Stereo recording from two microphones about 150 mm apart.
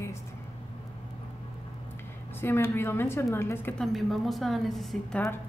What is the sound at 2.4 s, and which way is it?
A woman's voice, 15° left (ahead or behind).